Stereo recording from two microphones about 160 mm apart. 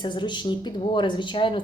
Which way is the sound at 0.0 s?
30° left (ahead or behind).